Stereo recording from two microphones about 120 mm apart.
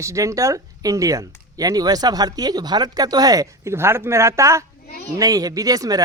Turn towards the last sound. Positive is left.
turn(degrees=-30)  # may be behind; listen again after turning